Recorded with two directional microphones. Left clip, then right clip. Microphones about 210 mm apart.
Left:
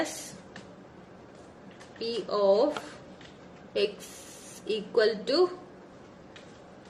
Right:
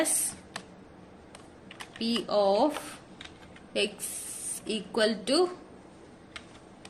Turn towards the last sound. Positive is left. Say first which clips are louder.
# left 1 dB
turn(degrees=-45)  # may be behind; listen again after turning